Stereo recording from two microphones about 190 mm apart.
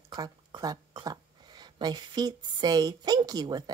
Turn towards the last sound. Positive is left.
turn(degrees=-20)  # may be behind; listen again after turning